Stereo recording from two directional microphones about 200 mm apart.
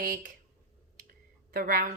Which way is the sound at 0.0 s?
45° right (ahead or behind).